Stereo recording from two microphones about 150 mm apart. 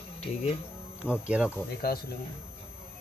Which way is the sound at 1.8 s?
90° left.